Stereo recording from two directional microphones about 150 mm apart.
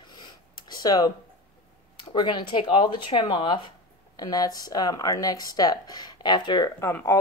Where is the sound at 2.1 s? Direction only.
30° left (ahead or behind).